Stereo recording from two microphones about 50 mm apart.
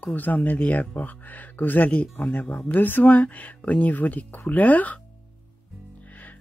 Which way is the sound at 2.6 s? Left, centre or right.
Left.